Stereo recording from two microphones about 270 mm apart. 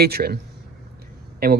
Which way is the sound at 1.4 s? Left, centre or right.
Right.